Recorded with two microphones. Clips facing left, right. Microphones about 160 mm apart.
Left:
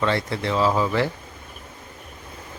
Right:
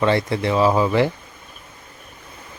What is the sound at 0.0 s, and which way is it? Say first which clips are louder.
Speech: right 4 dB; 15° right (ahead or behind).